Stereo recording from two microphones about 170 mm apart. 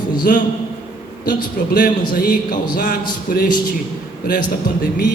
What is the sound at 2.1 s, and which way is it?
Speech, 55° left (ahead or behind).